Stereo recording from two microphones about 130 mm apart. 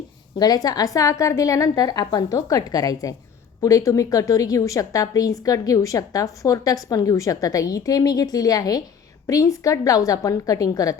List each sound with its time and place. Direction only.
0.3 s a woman's voice: 30° left (ahead or behind)